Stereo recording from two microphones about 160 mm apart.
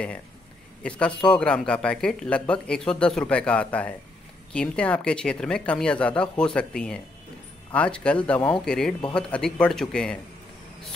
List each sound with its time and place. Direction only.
0.8 s speech: 5° left (ahead or behind)